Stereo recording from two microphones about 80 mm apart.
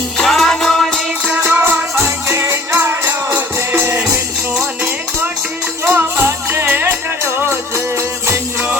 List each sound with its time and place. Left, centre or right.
0.2 s music: centre
1.2 s music: centre
2.0 s music: right
5.8 s music: right